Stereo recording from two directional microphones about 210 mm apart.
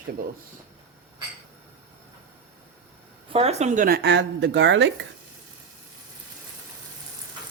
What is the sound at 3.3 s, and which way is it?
Speech, 30° right (ahead or behind).